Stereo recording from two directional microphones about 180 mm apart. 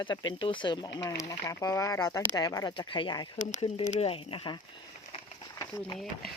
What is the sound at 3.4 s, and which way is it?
Speech, 45° left (ahead or behind).